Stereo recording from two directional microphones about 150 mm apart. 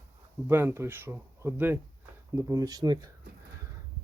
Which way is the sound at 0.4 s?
15° right (ahead or behind).